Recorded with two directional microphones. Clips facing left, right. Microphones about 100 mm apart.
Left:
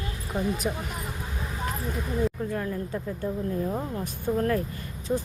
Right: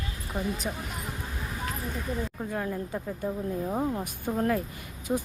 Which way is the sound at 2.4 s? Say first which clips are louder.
Left 2 dB; 15° right (ahead or behind).